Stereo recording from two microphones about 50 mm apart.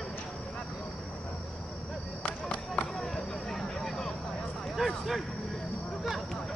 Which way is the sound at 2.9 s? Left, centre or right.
Centre.